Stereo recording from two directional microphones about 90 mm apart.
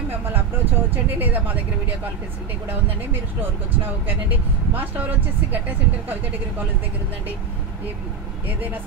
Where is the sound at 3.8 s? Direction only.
20° right (ahead or behind).